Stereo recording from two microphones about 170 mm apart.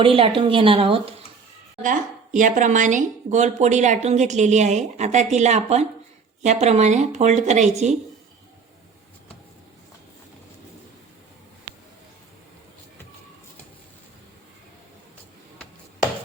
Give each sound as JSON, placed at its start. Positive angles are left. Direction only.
{"t": 0.0, "sound": "a woman's voice", "side_deg": -30}
{"t": 1.8, "sound": "speech", "side_deg": -50}